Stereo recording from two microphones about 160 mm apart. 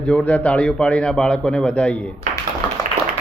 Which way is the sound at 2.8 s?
55° right (ahead or behind).